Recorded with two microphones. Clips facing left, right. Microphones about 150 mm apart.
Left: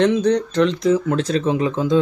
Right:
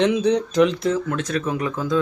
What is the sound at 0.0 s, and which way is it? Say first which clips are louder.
Speech: left 2 dB; 5° right (ahead or behind).